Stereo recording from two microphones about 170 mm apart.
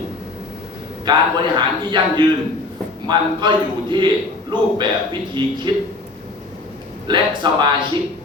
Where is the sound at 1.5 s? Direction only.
25° right (ahead or behind).